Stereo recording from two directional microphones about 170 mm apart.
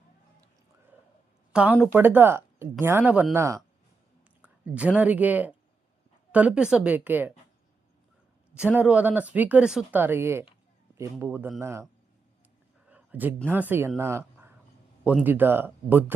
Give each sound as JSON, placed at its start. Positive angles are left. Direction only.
{"t": 1.8, "sound": "speech", "side_deg": -10}
{"t": 8.5, "sound": "speech", "side_deg": -10}
{"t": 12.9, "sound": "a sound", "side_deg": -10}
{"t": 13.5, "sound": "speech", "side_deg": -10}
{"t": 14.0, "sound": "a sound", "side_deg": -15}
{"t": 15.0, "sound": "speech", "side_deg": -10}